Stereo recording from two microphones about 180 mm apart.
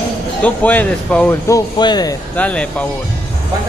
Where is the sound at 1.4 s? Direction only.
20° left (ahead or behind).